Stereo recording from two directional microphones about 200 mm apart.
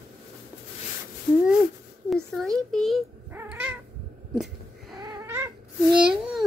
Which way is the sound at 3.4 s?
10° right (ahead or behind).